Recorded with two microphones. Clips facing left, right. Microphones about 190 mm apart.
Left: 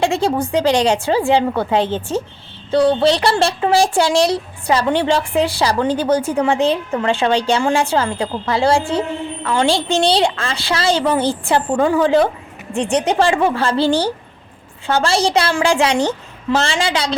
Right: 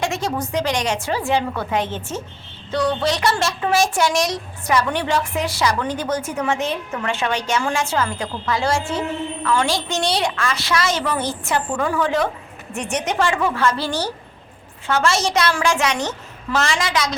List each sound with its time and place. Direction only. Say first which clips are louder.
0.0 s a woman's voice: left 6 dB; 30° left (ahead or behind)